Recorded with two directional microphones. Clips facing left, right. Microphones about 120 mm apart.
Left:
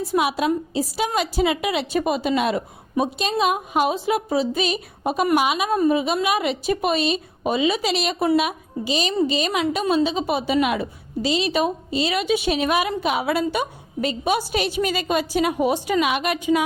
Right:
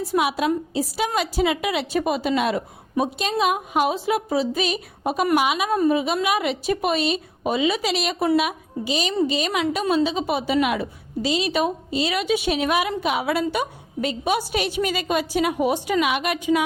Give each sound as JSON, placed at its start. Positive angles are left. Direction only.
{"t": 0.1, "sound": "a woman's voice", "side_deg": 25}